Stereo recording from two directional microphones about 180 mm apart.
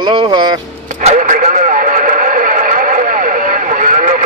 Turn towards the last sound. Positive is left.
turn(degrees=-45)  # may be behind; listen again after turning